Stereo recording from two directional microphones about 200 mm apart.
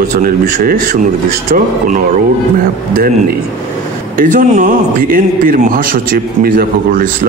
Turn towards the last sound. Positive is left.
turn(degrees=-45)  # may be behind; listen again after turning